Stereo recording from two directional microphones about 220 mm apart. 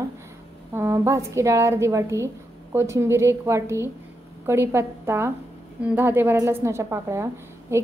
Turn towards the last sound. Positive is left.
turn(degrees=-10)  # may be behind; listen again after turning